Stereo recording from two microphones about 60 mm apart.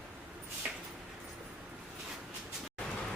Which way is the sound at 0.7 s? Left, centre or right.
Centre.